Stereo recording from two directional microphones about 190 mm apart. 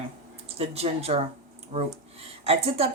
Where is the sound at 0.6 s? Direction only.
30° right (ahead or behind).